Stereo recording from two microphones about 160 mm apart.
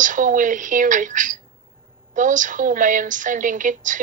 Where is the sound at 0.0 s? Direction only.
55° right (ahead or behind).